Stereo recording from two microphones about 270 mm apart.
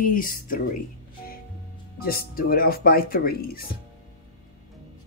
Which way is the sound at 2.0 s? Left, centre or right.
Left.